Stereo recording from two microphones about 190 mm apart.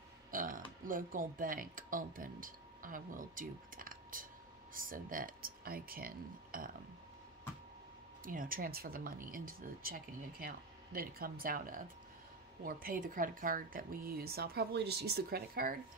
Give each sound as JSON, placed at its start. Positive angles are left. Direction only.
{"t": 0.3, "sound": "speech", "side_deg": -45}
{"t": 8.2, "sound": "speech", "side_deg": -45}